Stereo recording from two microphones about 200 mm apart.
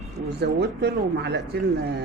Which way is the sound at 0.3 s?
55° right (ahead or behind).